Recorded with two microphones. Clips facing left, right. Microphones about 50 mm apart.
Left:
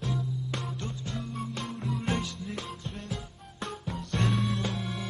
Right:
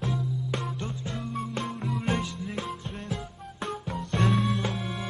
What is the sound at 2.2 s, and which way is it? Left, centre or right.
Music, centre.